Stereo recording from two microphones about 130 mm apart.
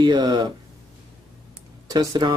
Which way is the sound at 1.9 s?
30° right (ahead or behind).